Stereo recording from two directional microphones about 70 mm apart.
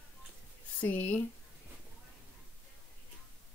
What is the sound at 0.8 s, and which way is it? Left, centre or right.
Speech, left.